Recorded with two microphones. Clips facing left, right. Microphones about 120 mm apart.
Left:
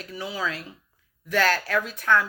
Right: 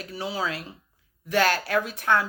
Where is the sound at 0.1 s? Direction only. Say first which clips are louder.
Right 1 dB; 30° right (ahead or behind).